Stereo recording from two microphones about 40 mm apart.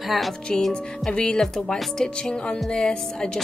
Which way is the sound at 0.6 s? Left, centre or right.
Centre.